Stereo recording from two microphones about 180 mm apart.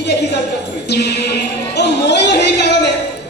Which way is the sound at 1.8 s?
70° left (ahead or behind).